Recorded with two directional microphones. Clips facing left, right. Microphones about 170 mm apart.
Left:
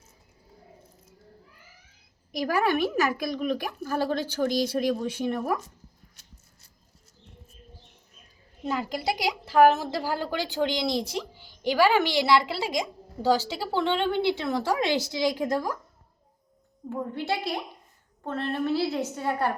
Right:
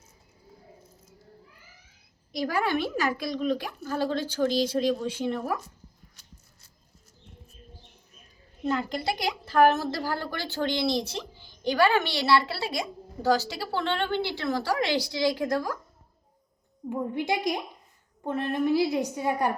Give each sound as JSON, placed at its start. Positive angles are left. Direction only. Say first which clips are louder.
{"t": 2.3, "sound": "a woman's voice", "louder": "left 2 dB", "side_deg": 15}
{"t": 8.6, "sound": "a woman's voice", "louder": "right 1 dB", "side_deg": 5}
{"t": 16.9, "sound": "a woman's voice", "louder": "right 2 dB", "side_deg": -15}